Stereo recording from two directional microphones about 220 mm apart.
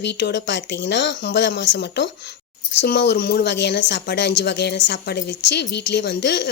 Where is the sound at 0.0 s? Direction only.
50° left (ahead or behind).